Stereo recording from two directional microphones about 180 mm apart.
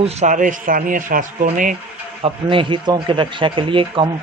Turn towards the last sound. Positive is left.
turn(degrees=-30)  # may be behind; listen again after turning